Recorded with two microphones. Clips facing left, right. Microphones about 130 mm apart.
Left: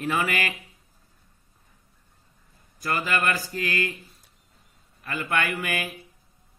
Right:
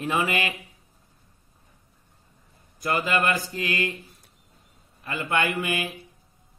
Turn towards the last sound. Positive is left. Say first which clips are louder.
# right 2 dB
turn(degrees=-25)  # may be behind; listen again after turning